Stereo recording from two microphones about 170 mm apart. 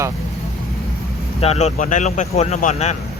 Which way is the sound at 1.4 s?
40° left (ahead or behind).